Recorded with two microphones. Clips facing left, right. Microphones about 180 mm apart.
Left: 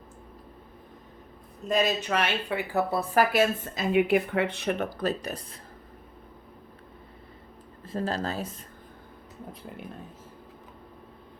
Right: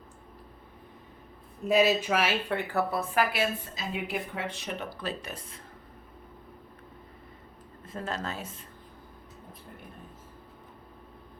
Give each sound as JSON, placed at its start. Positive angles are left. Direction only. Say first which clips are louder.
{"t": 1.6, "sound": "speech", "louder": "right 2 dB", "side_deg": -5}
{"t": 2.6, "sound": "speech", "louder": "left 2 dB", "side_deg": 10}
{"t": 2.9, "sound": "a woman's voice", "louder": "left 4 dB", "side_deg": 35}
{"t": 4.9, "sound": "speech", "louder": "left 7 dB", "side_deg": 40}
{"t": 7.9, "sound": "speech", "louder": "left 5 dB", "side_deg": 35}